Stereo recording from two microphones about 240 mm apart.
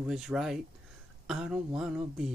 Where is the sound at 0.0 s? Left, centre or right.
Centre.